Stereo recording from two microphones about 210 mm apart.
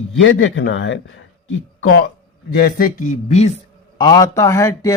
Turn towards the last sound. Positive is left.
turn(degrees=15)  # may be behind; listen again after turning